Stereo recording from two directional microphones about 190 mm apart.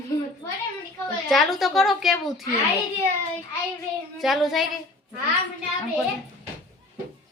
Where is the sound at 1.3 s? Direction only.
Centre (ahead or behind).